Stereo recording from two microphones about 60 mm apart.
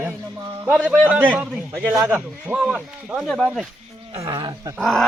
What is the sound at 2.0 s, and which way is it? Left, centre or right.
Speech, right.